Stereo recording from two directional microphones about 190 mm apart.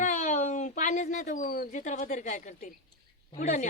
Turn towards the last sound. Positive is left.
turn(degrees=40)  # may be behind; listen again after turning